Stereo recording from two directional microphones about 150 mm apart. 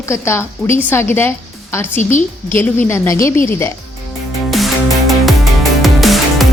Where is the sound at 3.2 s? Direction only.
15° left (ahead or behind).